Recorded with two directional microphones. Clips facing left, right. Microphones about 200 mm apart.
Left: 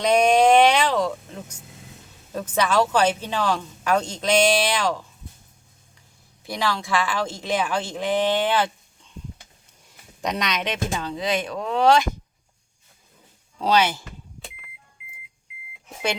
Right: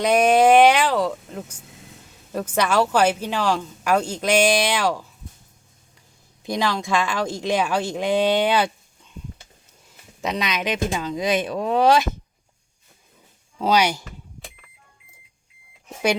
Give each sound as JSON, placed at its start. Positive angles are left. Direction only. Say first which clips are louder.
{"t": 0.0, "sound": "a sound", "louder": "right 1 dB", "side_deg": -10}
{"t": 2.3, "sound": "speech", "louder": "right 1 dB", "side_deg": -10}
{"t": 6.4, "sound": "speech", "louder": "right 3 dB", "side_deg": -15}
{"t": 10.2, "sound": "speech", "louder": "right 1 dB", "side_deg": -5}
{"t": 13.6, "sound": "speech", "louder": "right 1 dB", "side_deg": -10}